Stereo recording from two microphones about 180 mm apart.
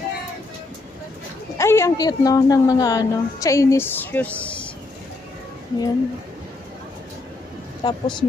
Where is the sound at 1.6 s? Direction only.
15° left (ahead or behind).